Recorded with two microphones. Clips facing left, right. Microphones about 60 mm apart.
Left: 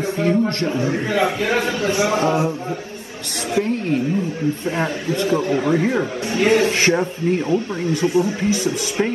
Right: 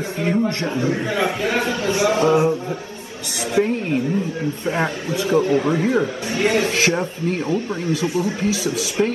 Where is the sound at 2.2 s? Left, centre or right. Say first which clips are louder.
Right 3 dB; right.